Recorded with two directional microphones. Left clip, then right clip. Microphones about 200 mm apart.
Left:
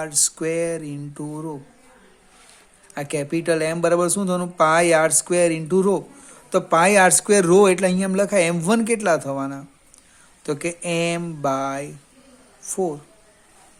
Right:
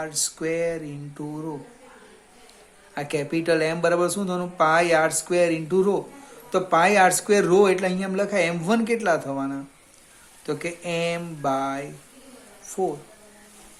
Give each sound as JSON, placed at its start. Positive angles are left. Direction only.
{"t": 0.0, "sound": "speech", "side_deg": 50}
{"t": 2.9, "sound": "speech", "side_deg": 40}